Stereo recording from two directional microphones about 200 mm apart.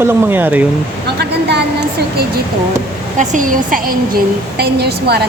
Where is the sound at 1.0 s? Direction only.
55° right (ahead or behind).